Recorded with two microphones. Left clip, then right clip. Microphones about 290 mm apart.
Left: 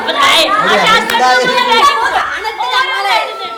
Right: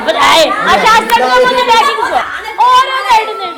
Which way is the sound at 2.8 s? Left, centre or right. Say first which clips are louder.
Right 3 dB; centre.